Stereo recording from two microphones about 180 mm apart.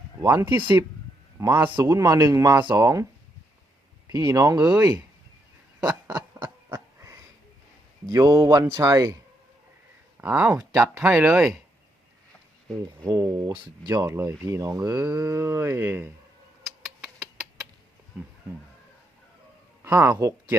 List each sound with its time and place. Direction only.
0.2 s speech: 20° right (ahead or behind)
5.8 s owl: 5° right (ahead or behind)
6.1 s a sound: 20° right (ahead or behind)
8.1 s speech: 20° right (ahead or behind)
10.2 s speech: 10° right (ahead or behind)
12.8 s speech: 25° right (ahead or behind)
18.2 s speech: 5° right (ahead or behind)
19.8 s speech: 15° right (ahead or behind)